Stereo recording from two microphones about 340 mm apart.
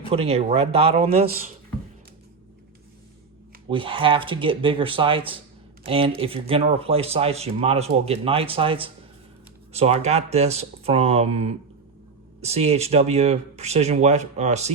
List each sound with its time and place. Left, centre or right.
0.1 s speech: centre
3.7 s speech: centre